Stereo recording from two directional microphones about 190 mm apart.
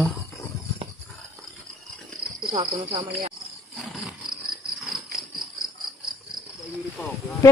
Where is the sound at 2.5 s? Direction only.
30° right (ahead or behind).